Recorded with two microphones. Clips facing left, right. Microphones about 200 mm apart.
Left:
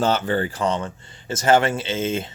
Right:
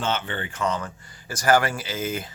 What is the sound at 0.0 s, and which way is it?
Speech, 40° left (ahead or behind).